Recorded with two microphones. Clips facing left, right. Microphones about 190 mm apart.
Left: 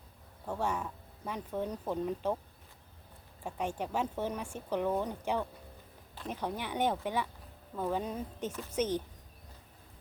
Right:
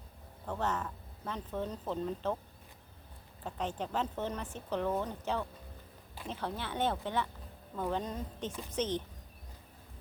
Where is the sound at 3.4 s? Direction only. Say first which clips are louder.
Left 1 dB; 10° left (ahead or behind).